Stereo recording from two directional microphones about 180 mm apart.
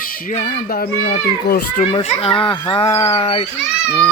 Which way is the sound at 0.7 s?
60° left (ahead or behind).